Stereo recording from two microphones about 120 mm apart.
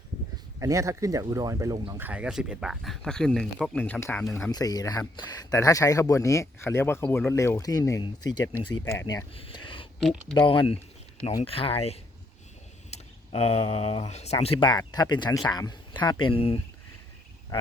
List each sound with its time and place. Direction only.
0.6 s speech: 25° right (ahead or behind)
2.0 s speech: 10° right (ahead or behind); by 4.0 s 10° left (ahead or behind)
4.5 s speech: 30° left (ahead or behind)
9.3 s speech: 45° left (ahead or behind)
10.0 s speech: centre (ahead or behind)
10.3 s speech: 45° left (ahead or behind)
12.9 s tick: 60° left (ahead or behind)
13.6 s speech: 45° left (ahead or behind)
14.6 s speech: 35° left (ahead or behind); by 16.6 s 50° left (ahead or behind)